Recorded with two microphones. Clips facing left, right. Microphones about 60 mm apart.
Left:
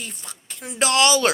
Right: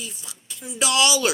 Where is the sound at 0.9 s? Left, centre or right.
Left.